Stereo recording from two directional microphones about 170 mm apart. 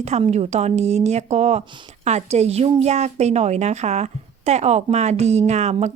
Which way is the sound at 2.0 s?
40° right (ahead or behind).